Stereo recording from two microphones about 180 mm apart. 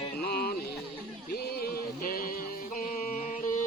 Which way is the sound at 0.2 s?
60° left (ahead or behind).